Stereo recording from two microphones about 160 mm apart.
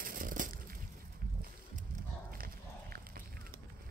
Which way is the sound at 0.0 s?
60° right (ahead or behind).